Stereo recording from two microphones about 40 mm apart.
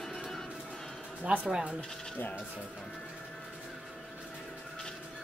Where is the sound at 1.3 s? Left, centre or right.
Right.